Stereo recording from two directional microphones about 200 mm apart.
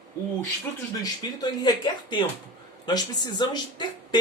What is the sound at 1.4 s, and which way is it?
A man's voice, 20° left (ahead or behind).